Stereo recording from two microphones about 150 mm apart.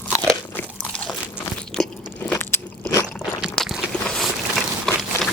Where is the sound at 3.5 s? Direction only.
5° left (ahead or behind).